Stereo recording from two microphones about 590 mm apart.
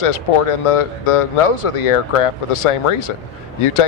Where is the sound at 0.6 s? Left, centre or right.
Left.